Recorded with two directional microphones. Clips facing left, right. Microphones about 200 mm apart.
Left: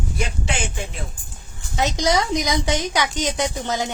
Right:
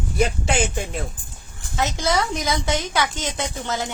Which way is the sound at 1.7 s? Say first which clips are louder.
Left 2 dB; 15° left (ahead or behind).